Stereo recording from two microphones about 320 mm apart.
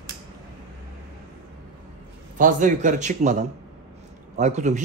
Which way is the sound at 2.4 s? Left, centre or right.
Right.